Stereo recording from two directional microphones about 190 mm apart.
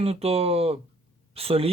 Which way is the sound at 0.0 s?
30° right (ahead or behind).